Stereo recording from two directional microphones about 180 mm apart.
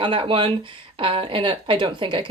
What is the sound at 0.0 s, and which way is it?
Speech, 30° right (ahead or behind).